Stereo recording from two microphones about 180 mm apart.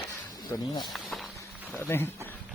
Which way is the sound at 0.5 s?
25° left (ahead or behind).